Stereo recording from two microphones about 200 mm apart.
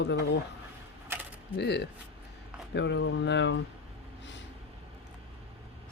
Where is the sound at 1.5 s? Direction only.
55° left (ahead or behind).